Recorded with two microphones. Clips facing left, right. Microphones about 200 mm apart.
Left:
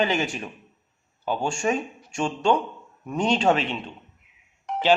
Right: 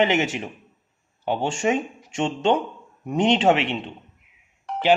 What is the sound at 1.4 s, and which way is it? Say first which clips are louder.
A man's voice: right 2 dB; 20° right (ahead or behind).